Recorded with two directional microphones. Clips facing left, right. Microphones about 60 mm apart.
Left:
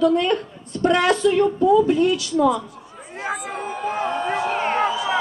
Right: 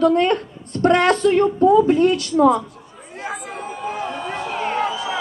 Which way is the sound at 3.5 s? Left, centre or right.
Left.